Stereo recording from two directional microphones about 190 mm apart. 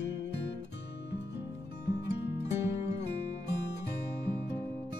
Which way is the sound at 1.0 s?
65° left (ahead or behind).